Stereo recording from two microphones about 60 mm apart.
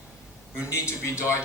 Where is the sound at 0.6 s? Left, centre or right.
Left.